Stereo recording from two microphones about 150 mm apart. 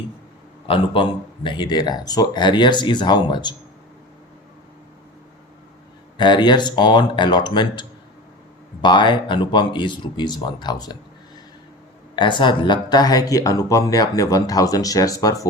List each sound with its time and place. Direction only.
0.7 s speech: 35° left (ahead or behind)
6.1 s speech: 30° left (ahead or behind)
12.1 s speech: 30° left (ahead or behind)